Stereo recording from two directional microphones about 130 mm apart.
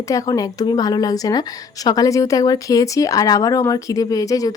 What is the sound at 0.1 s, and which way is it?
A woman's voice, 30° left (ahead or behind).